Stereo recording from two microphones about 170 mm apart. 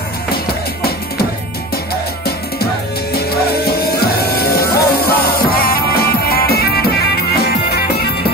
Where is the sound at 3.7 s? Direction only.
65° left (ahead or behind).